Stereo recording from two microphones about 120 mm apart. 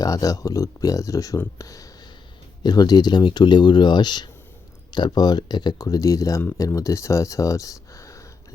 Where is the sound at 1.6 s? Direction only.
30° left (ahead or behind).